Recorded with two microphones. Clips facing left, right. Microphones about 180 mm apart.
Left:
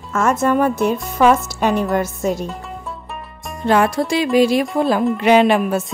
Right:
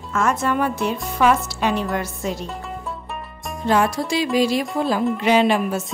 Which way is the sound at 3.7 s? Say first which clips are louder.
Left 3 dB; 60° left (ahead or behind).